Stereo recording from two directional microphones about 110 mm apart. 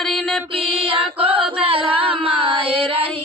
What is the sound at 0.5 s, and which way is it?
Female singing, 55° right (ahead or behind).